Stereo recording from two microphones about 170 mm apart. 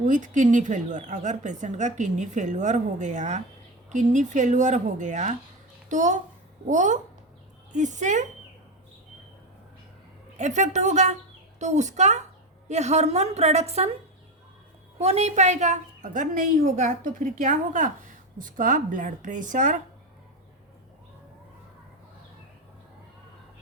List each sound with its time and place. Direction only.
0.0 s a woman's voice: 45° right (ahead or behind)
10.3 s a woman's voice: 45° right (ahead or behind)
14.9 s a woman's voice: 40° right (ahead or behind)